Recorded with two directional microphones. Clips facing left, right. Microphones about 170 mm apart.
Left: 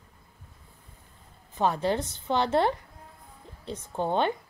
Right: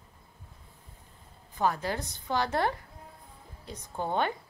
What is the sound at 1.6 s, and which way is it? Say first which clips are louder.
A woman's voice: left 4 dB; 25° left (ahead or behind).